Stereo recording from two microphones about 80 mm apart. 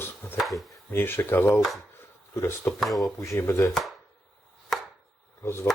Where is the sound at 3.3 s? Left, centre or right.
Left.